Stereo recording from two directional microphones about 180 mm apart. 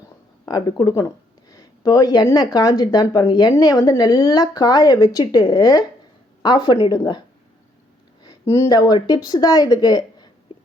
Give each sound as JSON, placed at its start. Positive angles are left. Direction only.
{"t": 0.4, "sound": "speech", "side_deg": 20}
{"t": 8.2, "sound": "a woman's voice", "side_deg": 20}